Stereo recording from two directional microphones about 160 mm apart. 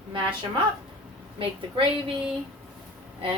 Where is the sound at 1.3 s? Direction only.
35° right (ahead or behind).